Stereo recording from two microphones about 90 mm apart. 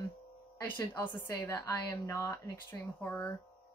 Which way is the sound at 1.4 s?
35° left (ahead or behind).